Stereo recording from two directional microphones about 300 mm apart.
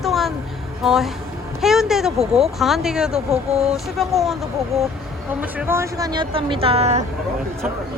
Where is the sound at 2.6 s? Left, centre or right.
Centre; by 7.0 s right.